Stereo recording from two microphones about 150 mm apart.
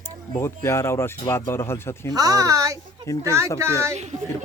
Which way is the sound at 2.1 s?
25° right (ahead or behind).